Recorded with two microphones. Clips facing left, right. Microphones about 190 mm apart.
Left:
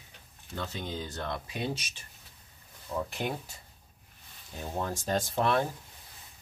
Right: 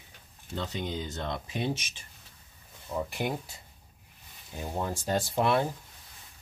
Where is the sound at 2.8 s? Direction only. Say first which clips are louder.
Right 1 dB; 10° right (ahead or behind).